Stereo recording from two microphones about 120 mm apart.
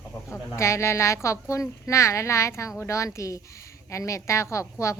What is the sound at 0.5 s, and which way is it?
A woman's voice, 25° left (ahead or behind).